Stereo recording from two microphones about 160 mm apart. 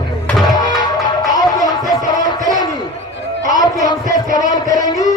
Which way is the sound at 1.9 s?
25° left (ahead or behind).